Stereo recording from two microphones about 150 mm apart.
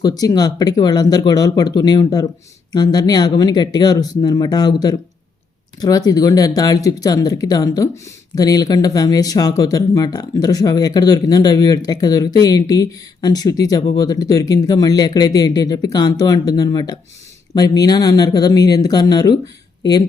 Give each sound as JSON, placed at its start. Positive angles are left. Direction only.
{"t": 0.0, "sound": "speech", "side_deg": 25}